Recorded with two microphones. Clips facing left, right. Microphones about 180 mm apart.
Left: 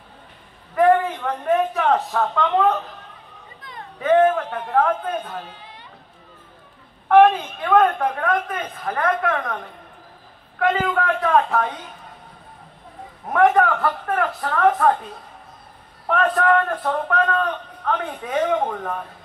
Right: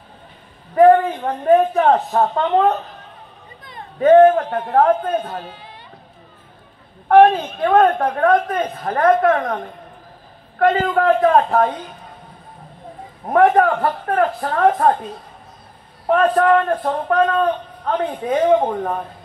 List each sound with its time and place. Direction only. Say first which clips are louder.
0.7 s a man's voice: right 5 dB; 40° right (ahead or behind)
4.0 s a woman's voice: right 6 dB; 35° right (ahead or behind)
7.1 s a woman's voice: right 2 dB; 50° right (ahead or behind)
13.3 s a woman's voice: right 3 dB; 45° right (ahead or behind)
16.1 s a man's voice: right 4 dB; 35° right (ahead or behind)